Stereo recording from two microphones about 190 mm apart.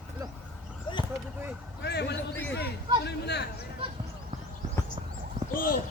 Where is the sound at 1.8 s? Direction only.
60° left (ahead or behind).